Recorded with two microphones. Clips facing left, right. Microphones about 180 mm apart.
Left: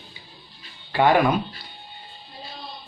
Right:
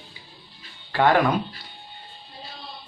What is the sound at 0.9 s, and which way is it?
Speech, 15° left (ahead or behind).